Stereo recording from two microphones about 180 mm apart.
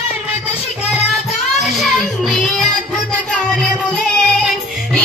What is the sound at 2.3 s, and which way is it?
Music, centre (ahead or behind).